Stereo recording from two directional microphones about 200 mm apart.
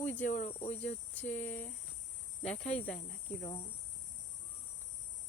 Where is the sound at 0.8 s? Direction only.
10° left (ahead or behind).